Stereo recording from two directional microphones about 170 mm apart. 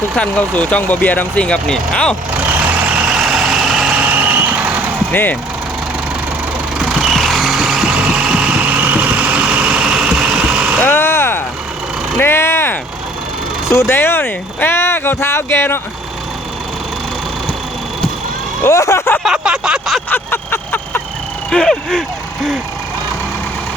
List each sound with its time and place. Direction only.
0.2 s speech: 5° left (ahead or behind)
2.9 s vehicle: 5° right (ahead or behind)
5.1 s speech: 10° left (ahead or behind)
6.7 s vehicle: centre (ahead or behind)
10.8 s vehicle: 10° left (ahead or behind)
13.7 s speech: 15° left (ahead or behind)
18.6 s vehicle: 15° left (ahead or behind)
19.2 s a sound: 5° right (ahead or behind)
20.1 s a sound: 10° left (ahead or behind)
21.5 s speech: centre (ahead or behind)